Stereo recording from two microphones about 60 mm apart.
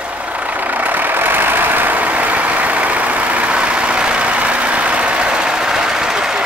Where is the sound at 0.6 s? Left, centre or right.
Right.